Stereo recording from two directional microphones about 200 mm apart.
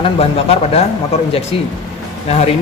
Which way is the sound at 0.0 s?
30° left (ahead or behind).